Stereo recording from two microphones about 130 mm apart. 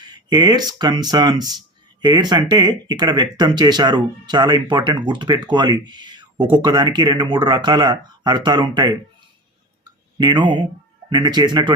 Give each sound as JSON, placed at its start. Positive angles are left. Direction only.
{"t": 0.0, "sound": "a sound", "side_deg": -35}
{"t": 0.3, "sound": "speech", "side_deg": -30}
{"t": 10.2, "sound": "speech", "side_deg": -35}